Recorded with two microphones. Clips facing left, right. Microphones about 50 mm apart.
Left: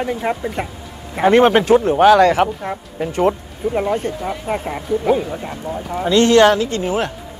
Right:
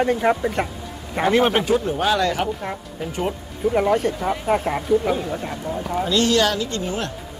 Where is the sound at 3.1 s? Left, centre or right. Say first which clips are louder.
Left 9 dB; centre.